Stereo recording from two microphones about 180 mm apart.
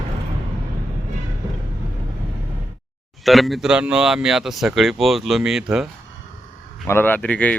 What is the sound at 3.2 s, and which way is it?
Speech, centre (ahead or behind).